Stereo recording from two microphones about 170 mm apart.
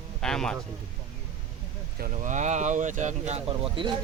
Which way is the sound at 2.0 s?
50° right (ahead or behind).